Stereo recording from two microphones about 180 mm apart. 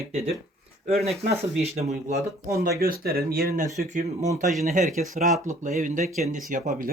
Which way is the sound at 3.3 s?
55° right (ahead or behind).